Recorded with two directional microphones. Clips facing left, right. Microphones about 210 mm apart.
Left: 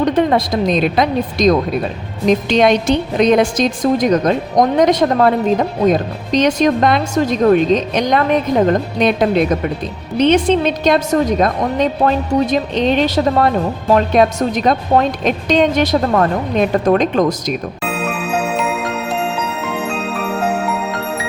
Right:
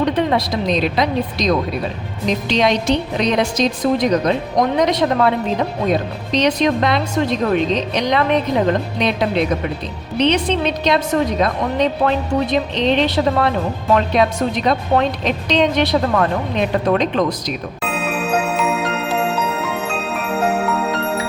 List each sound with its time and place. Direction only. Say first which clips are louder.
0.0 s a woman's voice: left 3 dB; 45° left (ahead or behind)